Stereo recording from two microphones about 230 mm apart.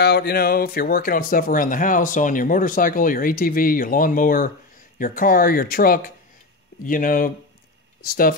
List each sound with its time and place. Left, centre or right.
0.0 s speech: left